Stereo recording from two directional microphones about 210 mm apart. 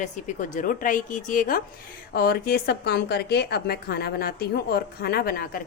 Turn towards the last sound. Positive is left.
turn(degrees=45)  # may be behind; listen again after turning